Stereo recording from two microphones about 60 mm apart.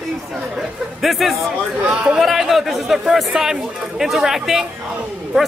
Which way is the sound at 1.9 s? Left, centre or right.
Centre.